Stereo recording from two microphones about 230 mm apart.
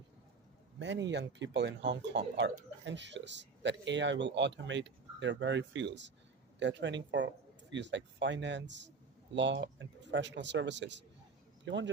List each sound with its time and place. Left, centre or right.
0.8 s speech: right